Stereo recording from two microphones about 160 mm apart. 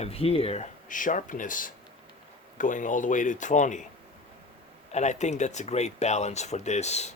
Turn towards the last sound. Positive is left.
turn(degrees=45)  # may be behind; listen again after turning